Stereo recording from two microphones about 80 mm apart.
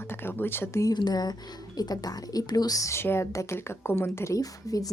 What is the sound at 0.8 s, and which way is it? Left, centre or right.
A woman's voice, left.